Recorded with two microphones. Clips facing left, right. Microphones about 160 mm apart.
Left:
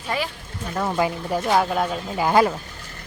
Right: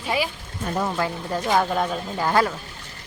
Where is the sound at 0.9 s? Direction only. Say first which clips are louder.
Left 3 dB; 15° left (ahead or behind).